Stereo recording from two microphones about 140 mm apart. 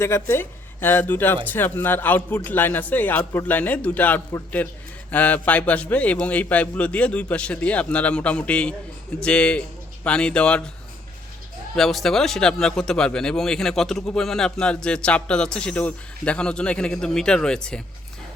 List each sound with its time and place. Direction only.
0.0 s a man's voice: 20° left (ahead or behind)
11.8 s speech: centre (ahead or behind)